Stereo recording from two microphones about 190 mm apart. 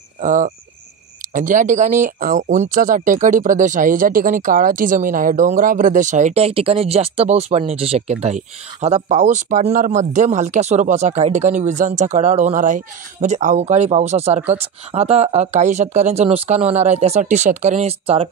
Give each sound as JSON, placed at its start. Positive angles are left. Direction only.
{"t": 0.2, "sound": "speech", "side_deg": -40}